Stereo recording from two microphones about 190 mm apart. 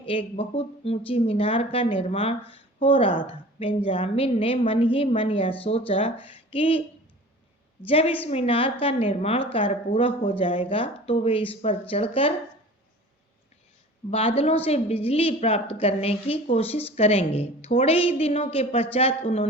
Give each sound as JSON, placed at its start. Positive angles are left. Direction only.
{"t": 0.0, "sound": "a woman's voice", "side_deg": 30}
{"t": 7.9, "sound": "a woman's voice", "side_deg": 30}
{"t": 14.1, "sound": "a woman's voice", "side_deg": 30}